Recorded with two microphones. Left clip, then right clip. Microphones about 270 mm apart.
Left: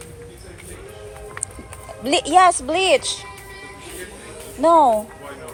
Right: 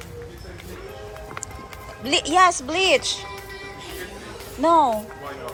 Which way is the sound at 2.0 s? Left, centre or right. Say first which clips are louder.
Left 3 dB; centre.